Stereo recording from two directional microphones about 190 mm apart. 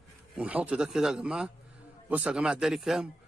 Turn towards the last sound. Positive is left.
turn(degrees=0)  # may be behind; listen again after turning